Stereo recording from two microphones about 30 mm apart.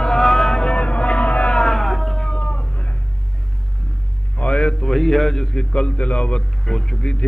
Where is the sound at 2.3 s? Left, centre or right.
Left.